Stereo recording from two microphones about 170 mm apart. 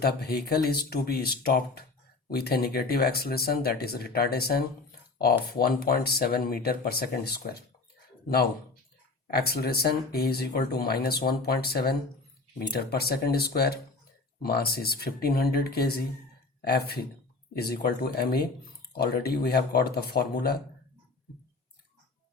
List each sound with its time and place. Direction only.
0.0 s speech: 65° left (ahead or behind)
9.2 s speech: 65° left (ahead or behind)